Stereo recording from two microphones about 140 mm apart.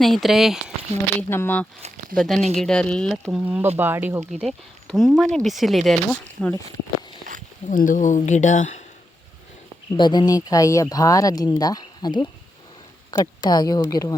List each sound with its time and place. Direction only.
0.0 s speech: centre (ahead or behind)
1.3 s speech: 15° left (ahead or behind)
2.1 s speech: centre (ahead or behind)
2.4 s speech: 50° right (ahead or behind)
2.6 s speech: 5° left (ahead or behind)
3.4 s speech: 10° right (ahead or behind)
4.3 s speech: centre (ahead or behind)
7.7 s speech: 70° left (ahead or behind)
10.0 s speech: 30° left (ahead or behind)